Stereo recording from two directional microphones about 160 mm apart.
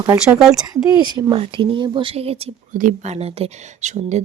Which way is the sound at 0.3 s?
Centre (ahead or behind).